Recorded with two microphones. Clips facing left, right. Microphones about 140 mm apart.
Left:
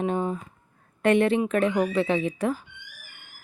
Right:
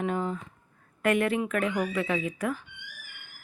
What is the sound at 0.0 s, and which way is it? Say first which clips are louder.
Speech: left 3 dB; 20° left (ahead or behind).